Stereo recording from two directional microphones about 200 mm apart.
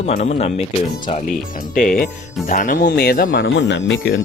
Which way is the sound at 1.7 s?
45° left (ahead or behind).